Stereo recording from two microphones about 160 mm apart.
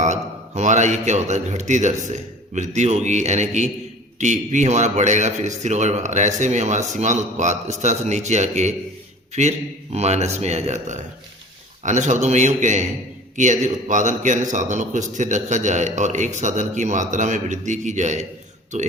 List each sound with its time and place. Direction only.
0.0 s a man's voice: 45° right (ahead or behind)